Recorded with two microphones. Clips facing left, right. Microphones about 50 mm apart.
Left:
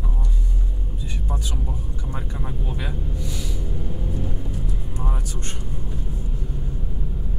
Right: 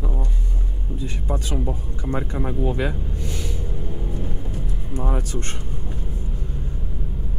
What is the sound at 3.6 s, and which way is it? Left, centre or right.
Vehicle, centre.